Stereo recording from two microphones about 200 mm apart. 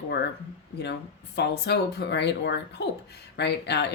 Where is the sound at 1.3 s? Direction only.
55° left (ahead or behind).